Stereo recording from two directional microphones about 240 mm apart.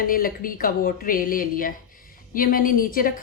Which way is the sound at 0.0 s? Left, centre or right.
Left.